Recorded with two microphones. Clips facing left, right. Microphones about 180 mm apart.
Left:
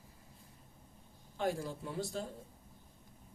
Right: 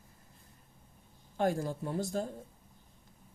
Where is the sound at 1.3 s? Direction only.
50° right (ahead or behind).